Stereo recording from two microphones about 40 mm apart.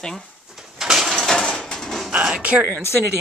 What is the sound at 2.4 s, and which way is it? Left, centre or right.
Speech, right.